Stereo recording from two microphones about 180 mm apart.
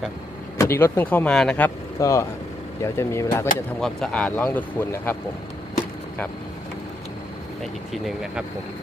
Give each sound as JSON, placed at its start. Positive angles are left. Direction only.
{"t": 0.6, "sound": "speech", "side_deg": 15}
{"t": 3.8, "sound": "speech", "side_deg": 5}
{"t": 7.6, "sound": "speech", "side_deg": 0}